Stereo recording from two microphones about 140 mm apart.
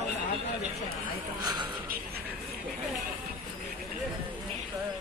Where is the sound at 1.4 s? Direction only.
30° right (ahead or behind).